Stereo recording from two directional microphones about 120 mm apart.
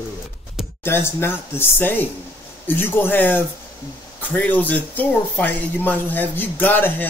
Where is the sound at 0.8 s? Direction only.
20° left (ahead or behind).